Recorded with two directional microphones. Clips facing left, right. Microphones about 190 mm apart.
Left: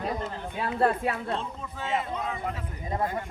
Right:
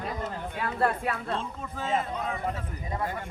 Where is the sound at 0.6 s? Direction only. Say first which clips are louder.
Left 3 dB; 25° left (ahead or behind).